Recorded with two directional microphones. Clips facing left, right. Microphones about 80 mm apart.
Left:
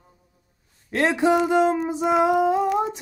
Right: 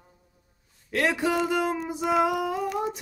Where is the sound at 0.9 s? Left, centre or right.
Left.